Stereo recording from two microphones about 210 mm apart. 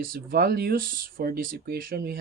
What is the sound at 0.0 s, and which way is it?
Speech, 45° right (ahead or behind).